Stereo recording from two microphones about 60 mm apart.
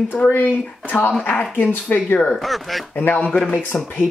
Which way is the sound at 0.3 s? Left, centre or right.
Left.